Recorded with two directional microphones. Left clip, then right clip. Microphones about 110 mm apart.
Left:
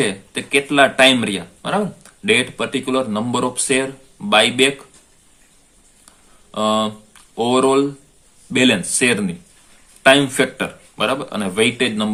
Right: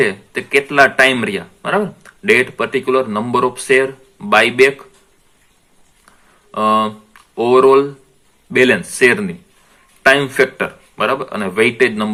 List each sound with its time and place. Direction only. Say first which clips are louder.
0.0 s speech: right 5 dB; 35° left (ahead or behind)
6.5 s speech: right 4 dB; 40° left (ahead or behind)